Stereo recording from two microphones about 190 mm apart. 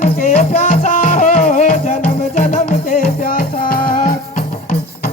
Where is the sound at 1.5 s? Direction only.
50° left (ahead or behind).